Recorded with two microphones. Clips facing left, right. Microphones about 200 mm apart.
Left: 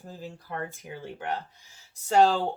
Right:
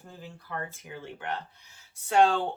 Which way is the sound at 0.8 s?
40° left (ahead or behind).